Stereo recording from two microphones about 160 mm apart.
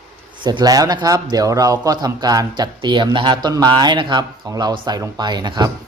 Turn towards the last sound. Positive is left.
turn(degrees=-25)  # may be behind; listen again after turning